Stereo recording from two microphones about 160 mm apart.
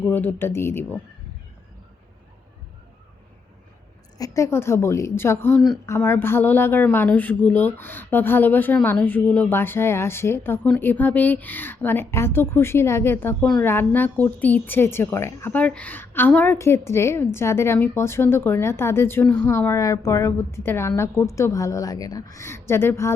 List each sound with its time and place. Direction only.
0.0 s speech: 10° left (ahead or behind)
4.2 s speech: 15° left (ahead or behind)